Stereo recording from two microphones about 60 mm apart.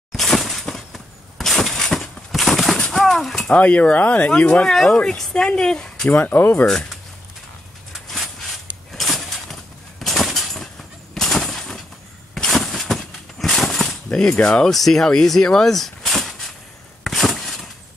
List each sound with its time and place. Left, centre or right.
0.1 s breaking: centre
0.7 s a sound: centre
3.5 s speech: left
4.6 s speech: centre
6.0 s speech: left
6.6 s speech: centre
7.9 s a sound: centre
14.0 s speech: centre
14.7 s speech: centre
17.0 s a sound: centre